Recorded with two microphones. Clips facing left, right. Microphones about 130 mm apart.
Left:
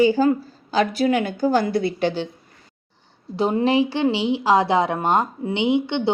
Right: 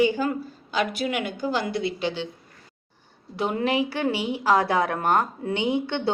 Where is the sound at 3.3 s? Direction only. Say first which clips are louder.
Left 5 dB; 30° left (ahead or behind).